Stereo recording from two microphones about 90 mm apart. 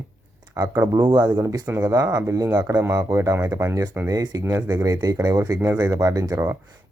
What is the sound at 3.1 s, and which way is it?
Speech, 40° right (ahead or behind).